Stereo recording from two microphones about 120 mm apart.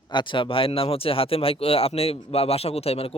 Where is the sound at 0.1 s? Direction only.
40° left (ahead or behind).